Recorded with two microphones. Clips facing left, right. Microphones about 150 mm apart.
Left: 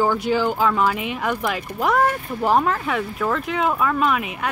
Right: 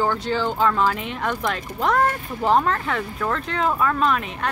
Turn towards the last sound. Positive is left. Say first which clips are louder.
# left 1 dB
turn(degrees=5)  # may be behind; listen again after turning